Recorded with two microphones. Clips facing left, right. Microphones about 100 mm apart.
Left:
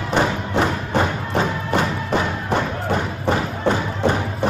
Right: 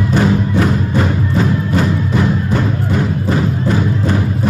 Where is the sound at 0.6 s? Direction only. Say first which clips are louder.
Right 4 dB; 30° left (ahead or behind).